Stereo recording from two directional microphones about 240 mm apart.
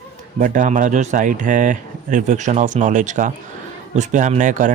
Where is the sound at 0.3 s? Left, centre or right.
Right.